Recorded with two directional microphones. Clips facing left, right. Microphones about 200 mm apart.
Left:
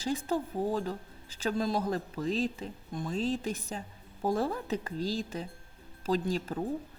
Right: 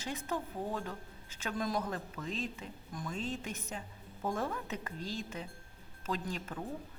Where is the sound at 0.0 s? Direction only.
30° left (ahead or behind).